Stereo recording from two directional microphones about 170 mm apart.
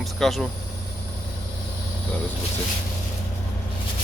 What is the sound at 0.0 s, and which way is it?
Vehicle, centre (ahead or behind).